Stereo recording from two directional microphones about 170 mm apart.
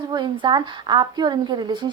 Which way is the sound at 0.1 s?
25° right (ahead or behind).